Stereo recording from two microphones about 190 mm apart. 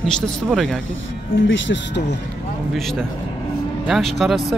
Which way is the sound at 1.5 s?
70° left (ahead or behind).